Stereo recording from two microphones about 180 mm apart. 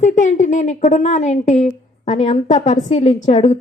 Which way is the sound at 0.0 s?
45° left (ahead or behind).